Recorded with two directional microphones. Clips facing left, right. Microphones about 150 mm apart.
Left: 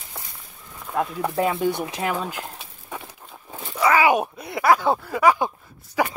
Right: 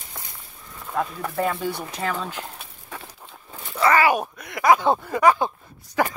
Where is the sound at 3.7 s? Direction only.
10° left (ahead or behind).